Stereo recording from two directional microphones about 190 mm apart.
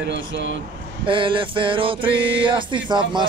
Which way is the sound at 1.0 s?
25° right (ahead or behind).